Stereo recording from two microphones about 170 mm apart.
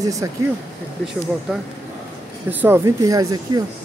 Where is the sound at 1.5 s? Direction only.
5° right (ahead or behind).